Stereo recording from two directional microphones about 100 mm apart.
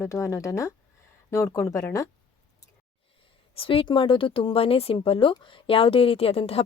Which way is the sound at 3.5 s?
65° left (ahead or behind).